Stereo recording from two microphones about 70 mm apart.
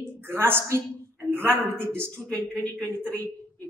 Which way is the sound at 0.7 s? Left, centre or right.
Right.